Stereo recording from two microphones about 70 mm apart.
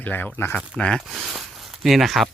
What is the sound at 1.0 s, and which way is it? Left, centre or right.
Speech, centre.